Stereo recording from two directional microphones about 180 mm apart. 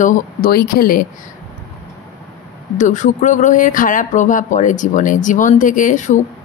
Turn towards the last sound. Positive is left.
turn(degrees=45)  # may be behind; listen again after turning